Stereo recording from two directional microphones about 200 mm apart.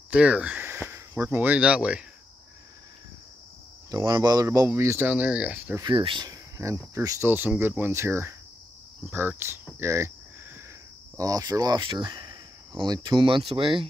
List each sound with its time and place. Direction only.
0.1 s speech: 5° right (ahead or behind)
3.9 s speech: 20° right (ahead or behind)
5.8 s speech: 25° right (ahead or behind)
11.1 s speech: 15° right (ahead or behind)